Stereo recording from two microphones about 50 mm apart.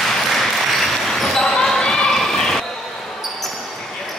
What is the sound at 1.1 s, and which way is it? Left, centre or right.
Basketball bounce, centre.